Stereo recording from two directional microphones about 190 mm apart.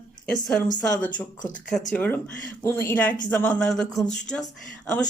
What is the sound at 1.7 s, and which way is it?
Speech, centre (ahead or behind).